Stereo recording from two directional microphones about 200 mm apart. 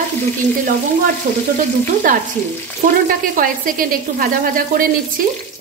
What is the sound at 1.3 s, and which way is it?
Speech, 45° right (ahead or behind).